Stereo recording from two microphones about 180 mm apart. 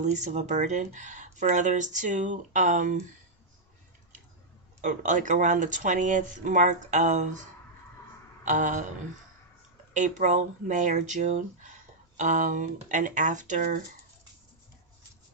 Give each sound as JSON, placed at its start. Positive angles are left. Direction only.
{"t": 0.0, "sound": "speech", "side_deg": -40}
{"t": 4.8, "sound": "speech", "side_deg": -45}
{"t": 8.4, "sound": "speech", "side_deg": -45}
{"t": 9.9, "sound": "speech", "side_deg": -45}